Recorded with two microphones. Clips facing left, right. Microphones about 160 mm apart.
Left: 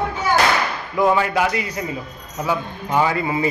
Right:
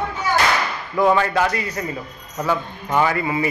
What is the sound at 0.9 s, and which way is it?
A man's voice, 10° left (ahead or behind).